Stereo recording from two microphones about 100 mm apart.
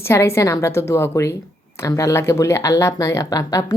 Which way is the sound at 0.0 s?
25° left (ahead or behind).